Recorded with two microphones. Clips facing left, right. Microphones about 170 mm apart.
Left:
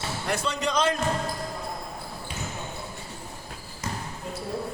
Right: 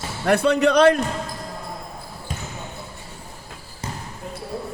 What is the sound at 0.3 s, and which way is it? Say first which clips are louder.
Speech: right 12 dB; 60° right (ahead or behind).